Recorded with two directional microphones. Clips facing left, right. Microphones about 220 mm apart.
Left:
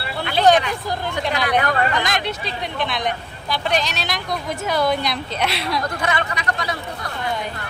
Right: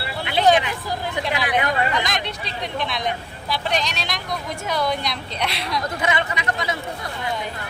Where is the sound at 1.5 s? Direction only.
20° right (ahead or behind).